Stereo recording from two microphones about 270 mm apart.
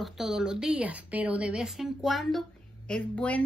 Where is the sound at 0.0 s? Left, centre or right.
Centre.